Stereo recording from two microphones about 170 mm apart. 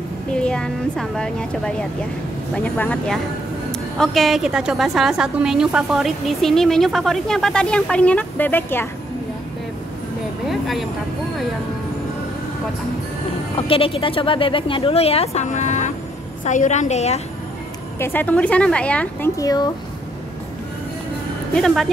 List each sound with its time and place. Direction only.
0.3 s a woman's voice: 5° left (ahead or behind)
10.5 s a sound: centre (ahead or behind)
13.6 s a woman's voice: 30° left (ahead or behind)
17.9 s speech: 15° left (ahead or behind)
19.3 s speech: 20° left (ahead or behind)
21.5 s a woman's voice: centre (ahead or behind)